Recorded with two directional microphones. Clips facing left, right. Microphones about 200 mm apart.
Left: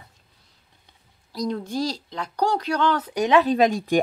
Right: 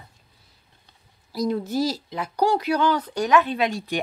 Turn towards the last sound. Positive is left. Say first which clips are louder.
# left 6 dB
turn(degrees=45)  # may be behind; listen again after turning